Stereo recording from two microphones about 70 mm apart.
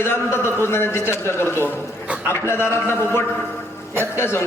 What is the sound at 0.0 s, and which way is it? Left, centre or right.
A man's voice, left.